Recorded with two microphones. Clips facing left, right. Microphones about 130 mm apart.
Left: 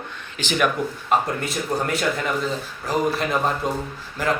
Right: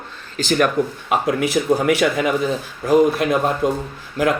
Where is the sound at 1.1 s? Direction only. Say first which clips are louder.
Right 5 dB; 90° right.